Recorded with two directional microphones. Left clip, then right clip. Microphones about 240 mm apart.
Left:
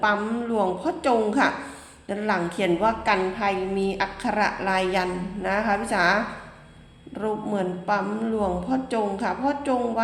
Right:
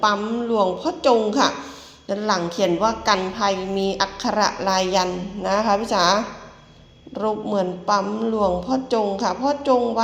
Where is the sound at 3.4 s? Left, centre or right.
Centre.